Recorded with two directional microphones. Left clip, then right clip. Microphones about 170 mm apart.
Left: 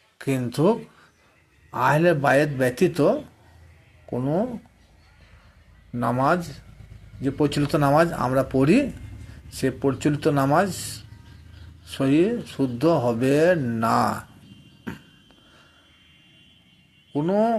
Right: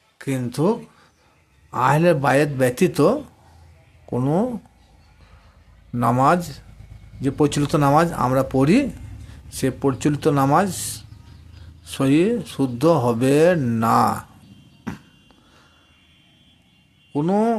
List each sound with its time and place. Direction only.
0.2 s speech: 5° right (ahead or behind)
1.7 s speech: 20° right (ahead or behind)
5.9 s speech: 25° right (ahead or behind)
17.1 s speech: 20° right (ahead or behind)